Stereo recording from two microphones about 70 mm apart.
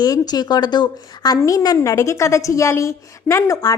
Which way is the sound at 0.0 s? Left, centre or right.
Left.